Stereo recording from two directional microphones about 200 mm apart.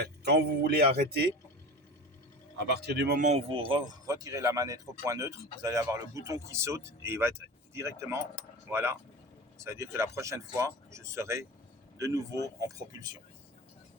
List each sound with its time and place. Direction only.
0.3 s speech: 50° right (ahead or behind)
2.6 s speech: 55° right (ahead or behind)
3.2 s speech: 35° right (ahead or behind); by 13.1 s 20° right (ahead or behind)